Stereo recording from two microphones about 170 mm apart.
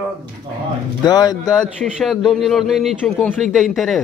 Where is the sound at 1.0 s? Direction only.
25° left (ahead or behind).